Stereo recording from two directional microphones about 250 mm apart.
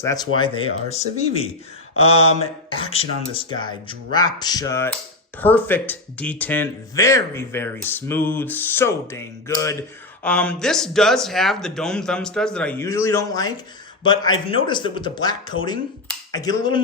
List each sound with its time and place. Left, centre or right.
0.0 s speech: centre
2.6 s speech: left